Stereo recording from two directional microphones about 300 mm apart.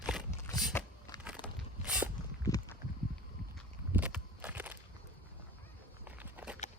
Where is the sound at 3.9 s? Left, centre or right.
Centre.